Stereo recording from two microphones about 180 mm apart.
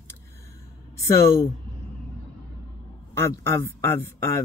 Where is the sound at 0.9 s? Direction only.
15° left (ahead or behind).